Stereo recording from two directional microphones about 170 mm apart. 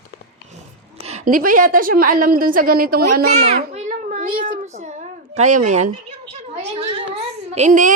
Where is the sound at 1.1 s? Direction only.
55° right (ahead or behind).